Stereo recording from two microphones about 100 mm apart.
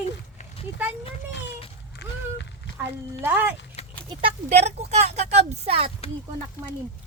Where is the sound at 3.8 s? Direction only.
90° left.